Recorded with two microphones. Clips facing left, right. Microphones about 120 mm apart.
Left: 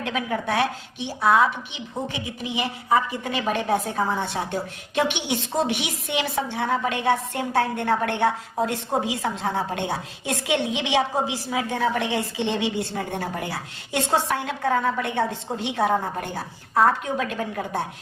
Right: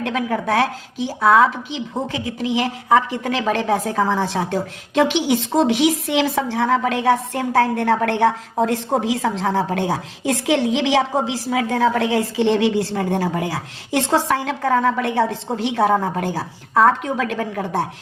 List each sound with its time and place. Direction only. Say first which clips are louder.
0.0 s a woman's voice: right 5 dB; 85° right
2.1 s a woman's voice: right 7 dB; 90° right; by 17.7 s 70° right (ahead or behind)